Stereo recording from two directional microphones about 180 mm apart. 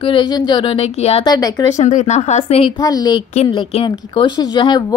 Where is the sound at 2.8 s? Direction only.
20° left (ahead or behind).